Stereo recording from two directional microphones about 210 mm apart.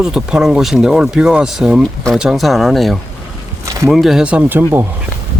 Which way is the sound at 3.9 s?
Centre (ahead or behind).